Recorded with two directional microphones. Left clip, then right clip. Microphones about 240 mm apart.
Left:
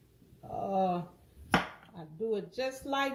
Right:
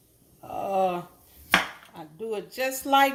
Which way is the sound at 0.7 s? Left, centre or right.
Right.